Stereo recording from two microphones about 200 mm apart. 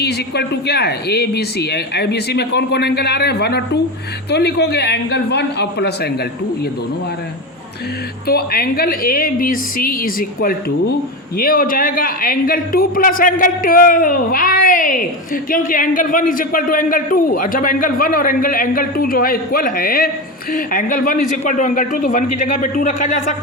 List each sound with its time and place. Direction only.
0.0 s speech: 55° left (ahead or behind)
8.3 s a man's voice: 50° left (ahead or behind)